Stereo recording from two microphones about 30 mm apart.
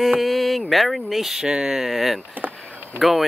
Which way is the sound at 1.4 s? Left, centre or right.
Right.